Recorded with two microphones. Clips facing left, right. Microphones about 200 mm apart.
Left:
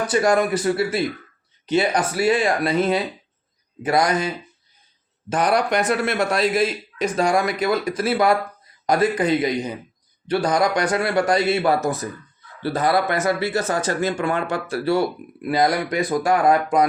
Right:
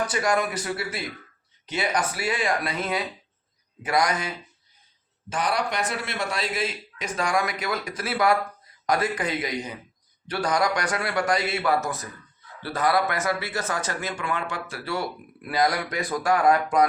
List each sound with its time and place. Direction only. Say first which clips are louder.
0.1 s a man's voice: left 7 dB; 30° left (ahead or behind)
5.3 s a man's voice: left 7 dB; 45° left (ahead or behind)
7.2 s a man's voice: left 5 dB; 30° left (ahead or behind)
15.4 s a man's voice: left 5 dB; 25° left (ahead or behind)